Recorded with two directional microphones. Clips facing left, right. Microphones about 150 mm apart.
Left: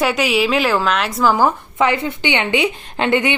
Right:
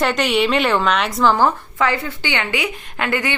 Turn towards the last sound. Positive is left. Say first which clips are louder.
# left 5 dB
turn(degrees=25)  # may be behind; listen again after turning